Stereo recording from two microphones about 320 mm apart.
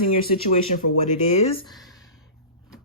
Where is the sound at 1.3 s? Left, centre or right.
Centre.